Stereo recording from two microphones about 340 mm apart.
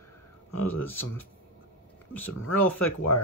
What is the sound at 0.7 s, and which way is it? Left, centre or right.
Speech, centre.